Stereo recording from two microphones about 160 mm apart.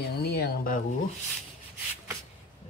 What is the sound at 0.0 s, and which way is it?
Speech, 90° left.